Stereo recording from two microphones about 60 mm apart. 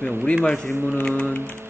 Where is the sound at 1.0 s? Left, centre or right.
Centre.